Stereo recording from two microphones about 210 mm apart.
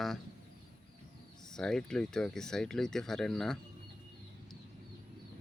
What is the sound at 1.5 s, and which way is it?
Speech, 5° left (ahead or behind).